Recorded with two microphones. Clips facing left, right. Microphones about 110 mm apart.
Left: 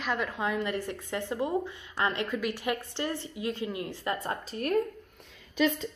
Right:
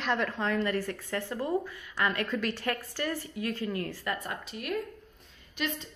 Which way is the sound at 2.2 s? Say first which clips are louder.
Even; 10° left (ahead or behind).